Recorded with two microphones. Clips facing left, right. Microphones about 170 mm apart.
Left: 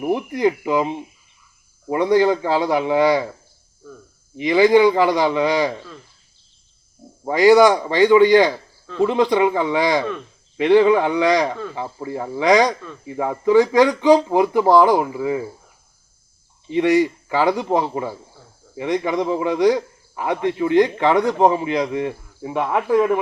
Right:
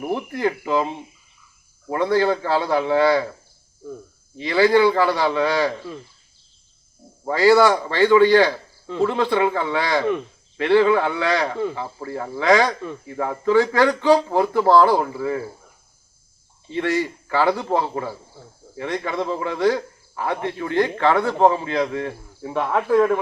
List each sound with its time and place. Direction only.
0.0 s a man's voice: 15° left (ahead or behind)
4.4 s a man's voice: 15° left (ahead or behind)
7.3 s a man's voice: 15° left (ahead or behind)
16.6 s a man's voice: 15° left (ahead or behind)